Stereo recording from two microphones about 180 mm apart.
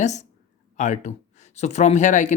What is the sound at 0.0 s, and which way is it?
Speech, 40° left (ahead or behind).